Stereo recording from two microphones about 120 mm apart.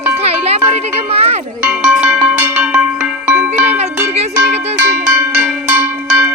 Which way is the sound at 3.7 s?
65° right (ahead or behind).